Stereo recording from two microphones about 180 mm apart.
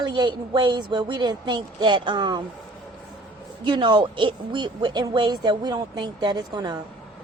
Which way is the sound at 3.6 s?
25° right (ahead or behind).